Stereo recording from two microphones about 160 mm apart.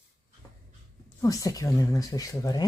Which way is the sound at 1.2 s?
20° left (ahead or behind).